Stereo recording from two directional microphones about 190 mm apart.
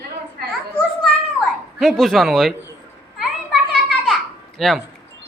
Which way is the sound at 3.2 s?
Centre (ahead or behind).